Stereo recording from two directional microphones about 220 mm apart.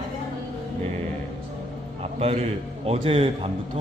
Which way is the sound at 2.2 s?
25° right (ahead or behind).